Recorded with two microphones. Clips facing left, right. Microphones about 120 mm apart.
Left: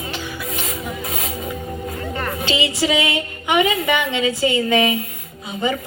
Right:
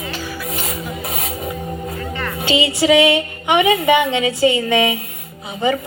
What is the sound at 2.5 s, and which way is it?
A woman's voice, 25° right (ahead or behind).